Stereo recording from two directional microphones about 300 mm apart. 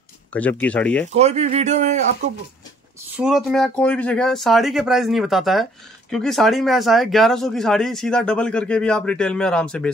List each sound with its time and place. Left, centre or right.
0.3 s speech: centre
1.1 s speech: right
3.2 s speech: centre